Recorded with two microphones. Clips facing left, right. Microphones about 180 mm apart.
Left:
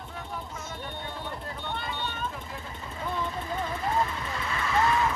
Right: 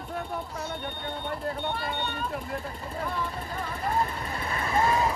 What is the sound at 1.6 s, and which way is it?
Vehicle, 60° right (ahead or behind).